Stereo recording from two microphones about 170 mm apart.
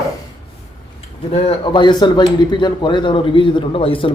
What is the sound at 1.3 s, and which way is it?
A man's voice, 25° left (ahead or behind).